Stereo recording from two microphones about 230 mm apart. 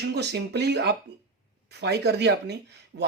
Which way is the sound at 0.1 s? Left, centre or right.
Right.